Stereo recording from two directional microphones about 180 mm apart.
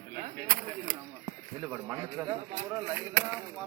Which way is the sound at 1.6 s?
15° right (ahead or behind).